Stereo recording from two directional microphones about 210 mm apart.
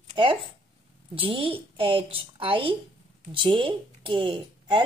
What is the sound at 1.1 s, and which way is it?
A woman's voice, 25° right (ahead or behind).